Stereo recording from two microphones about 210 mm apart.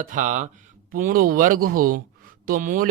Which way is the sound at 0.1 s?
35° right (ahead or behind).